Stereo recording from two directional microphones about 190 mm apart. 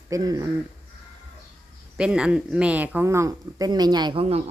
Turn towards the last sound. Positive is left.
turn(degrees=-30)  # may be behind; listen again after turning